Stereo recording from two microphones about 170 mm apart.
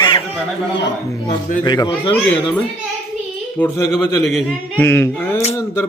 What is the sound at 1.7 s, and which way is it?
Speech, 25° left (ahead or behind).